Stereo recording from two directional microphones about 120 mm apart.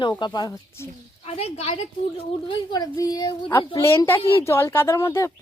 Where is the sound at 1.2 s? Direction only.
60° left (ahead or behind).